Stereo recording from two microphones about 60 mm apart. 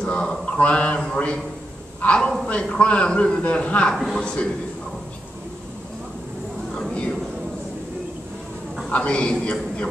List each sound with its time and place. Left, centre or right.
0.0 s a man's voice: centre
3.9 s a man's voice: centre
4.2 s a man's voice: centre
6.7 s a sound: centre
8.8 s a man's voice: left